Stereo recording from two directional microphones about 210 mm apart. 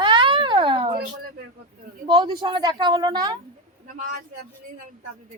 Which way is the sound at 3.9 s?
35° right (ahead or behind).